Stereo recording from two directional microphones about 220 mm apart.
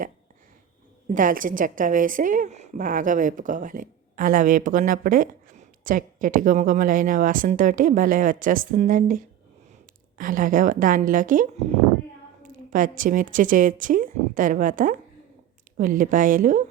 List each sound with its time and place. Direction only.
1.1 s a woman's voice: 40° right (ahead or behind)